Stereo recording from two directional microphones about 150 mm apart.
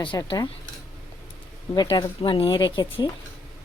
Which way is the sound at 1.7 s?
25° left (ahead or behind).